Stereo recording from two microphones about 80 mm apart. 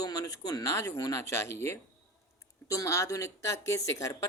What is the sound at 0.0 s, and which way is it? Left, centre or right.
A woman's voice, left.